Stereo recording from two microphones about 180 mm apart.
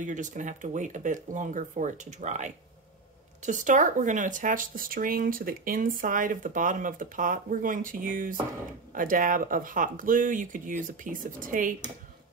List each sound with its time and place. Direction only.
0.0 s speech: 45° right (ahead or behind)